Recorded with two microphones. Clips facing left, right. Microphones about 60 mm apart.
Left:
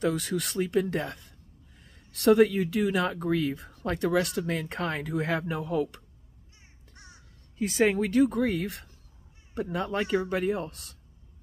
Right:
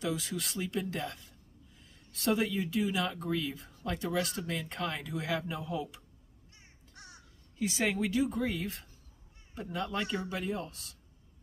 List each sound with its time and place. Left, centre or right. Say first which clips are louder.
0.0 s speech: left 7 dB; left
7.5 s speech: left 7 dB; left
9.8 s speech: left 6 dB; left